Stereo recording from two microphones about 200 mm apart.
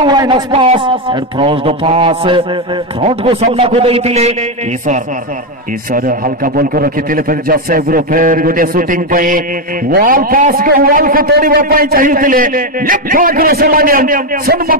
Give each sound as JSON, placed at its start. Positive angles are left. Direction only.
{"t": 0.0, "sound": "a man's voice", "side_deg": -20}